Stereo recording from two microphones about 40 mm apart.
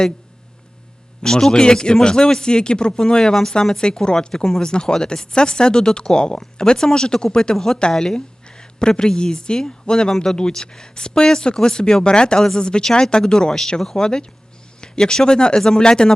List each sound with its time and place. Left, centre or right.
1.2 s a woman's voice: centre